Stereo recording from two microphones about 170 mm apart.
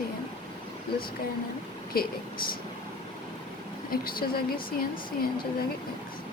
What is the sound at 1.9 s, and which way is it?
Speech, 60° left (ahead or behind).